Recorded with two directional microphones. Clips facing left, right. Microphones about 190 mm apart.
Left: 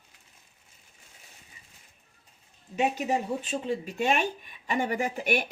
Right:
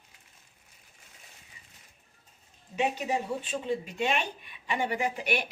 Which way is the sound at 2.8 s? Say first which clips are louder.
Left 2 dB; 45° left (ahead or behind).